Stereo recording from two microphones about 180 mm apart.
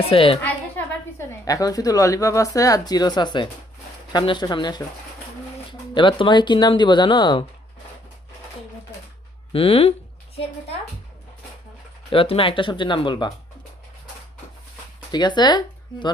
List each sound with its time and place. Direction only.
0.0 s speech: 30° left (ahead or behind)
1.3 s speech: 20° left (ahead or behind)
5.9 s speech: 25° left (ahead or behind)
9.5 s speech: 30° left (ahead or behind)
12.1 s speech: 30° left (ahead or behind)
15.1 s speech: 25° left (ahead or behind)